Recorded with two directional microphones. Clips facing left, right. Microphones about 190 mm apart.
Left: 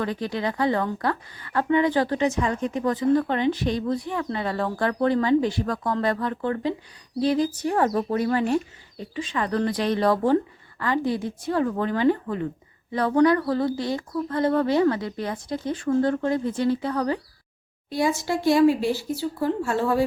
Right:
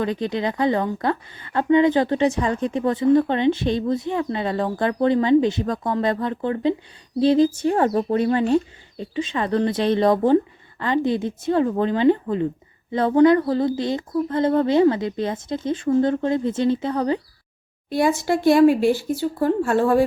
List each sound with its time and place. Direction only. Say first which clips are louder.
0.0 s speech: right 3 dB; 20° right (ahead or behind)
17.8 s speech: right 4 dB; 55° right (ahead or behind)